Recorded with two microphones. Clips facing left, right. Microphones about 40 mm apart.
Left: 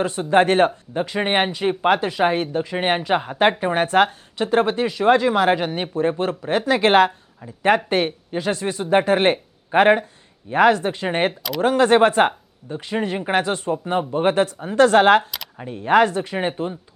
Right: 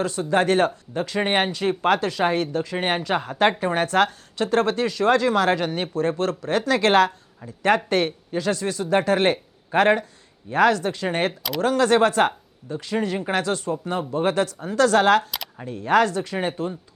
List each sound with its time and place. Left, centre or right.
0.0 s speech: left